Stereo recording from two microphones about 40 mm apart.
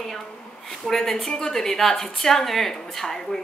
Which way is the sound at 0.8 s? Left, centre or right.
Centre.